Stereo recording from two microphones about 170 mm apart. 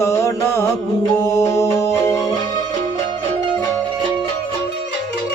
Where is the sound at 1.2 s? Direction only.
20° left (ahead or behind).